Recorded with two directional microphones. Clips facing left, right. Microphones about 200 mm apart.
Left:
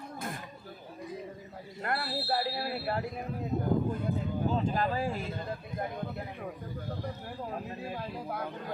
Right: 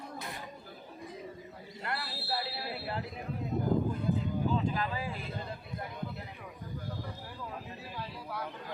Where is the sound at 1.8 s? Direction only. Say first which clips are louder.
Left 6 dB; 50° left (ahead or behind).